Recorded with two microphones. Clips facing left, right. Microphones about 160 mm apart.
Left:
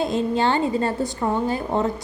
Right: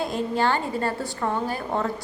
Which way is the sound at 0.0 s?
20° left (ahead or behind).